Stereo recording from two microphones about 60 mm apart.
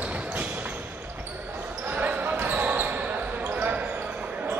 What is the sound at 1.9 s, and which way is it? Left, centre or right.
Basketball bounce, right.